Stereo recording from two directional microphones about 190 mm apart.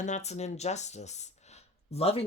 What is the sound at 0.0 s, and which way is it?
Speech, 35° left (ahead or behind).